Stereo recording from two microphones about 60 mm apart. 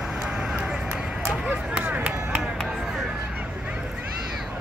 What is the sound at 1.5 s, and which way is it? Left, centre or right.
Chop, right.